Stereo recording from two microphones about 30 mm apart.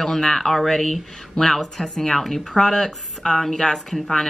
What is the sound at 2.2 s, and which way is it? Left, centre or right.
A woman's voice, centre.